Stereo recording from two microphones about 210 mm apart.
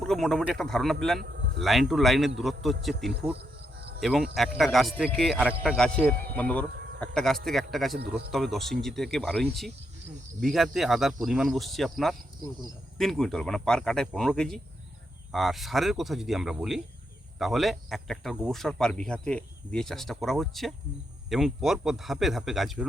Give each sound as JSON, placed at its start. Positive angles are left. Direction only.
{"t": 0.0, "sound": "speech", "side_deg": 0}
{"t": 1.2, "sound": "speech", "side_deg": -50}
{"t": 1.6, "sound": "speech", "side_deg": 0}